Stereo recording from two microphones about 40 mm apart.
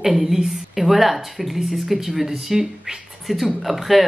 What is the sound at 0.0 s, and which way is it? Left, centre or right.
A woman's voice, centre.